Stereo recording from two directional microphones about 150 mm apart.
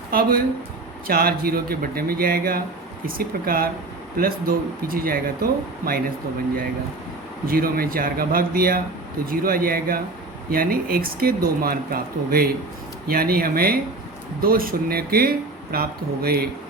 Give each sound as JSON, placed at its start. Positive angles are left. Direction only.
{"t": 0.1, "sound": "speech", "side_deg": -75}
{"t": 1.0, "sound": "speech", "side_deg": -90}
{"t": 7.4, "sound": "speech", "side_deg": -80}